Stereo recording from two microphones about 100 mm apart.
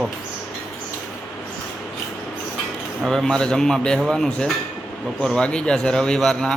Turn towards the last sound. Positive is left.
turn(degrees=5)  # may be behind; listen again after turning